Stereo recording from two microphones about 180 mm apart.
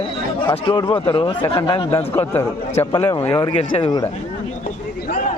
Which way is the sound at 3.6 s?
30° left (ahead or behind).